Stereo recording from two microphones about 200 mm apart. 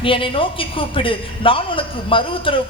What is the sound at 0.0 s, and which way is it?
A man's voice, 25° left (ahead or behind).